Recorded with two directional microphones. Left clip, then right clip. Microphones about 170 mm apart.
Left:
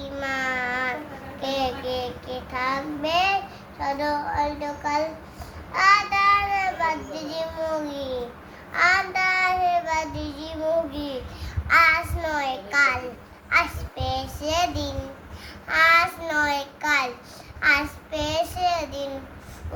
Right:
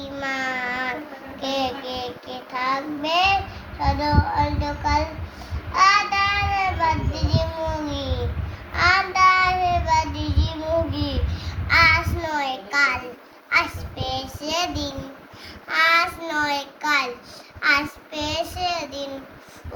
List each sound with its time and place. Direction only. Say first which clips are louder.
0.0 s a sound: right 1 dB; 10° left (ahead or behind)
1.4 s child singing: right 1 dB; 10° left (ahead or behind)
4.4 s child singing: right 2 dB; 15° left (ahead or behind)